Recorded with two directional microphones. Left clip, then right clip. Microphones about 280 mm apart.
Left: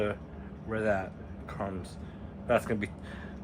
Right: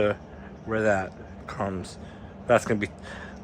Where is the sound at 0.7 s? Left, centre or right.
Right.